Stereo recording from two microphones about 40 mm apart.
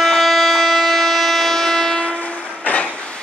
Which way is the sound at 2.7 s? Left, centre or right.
Left.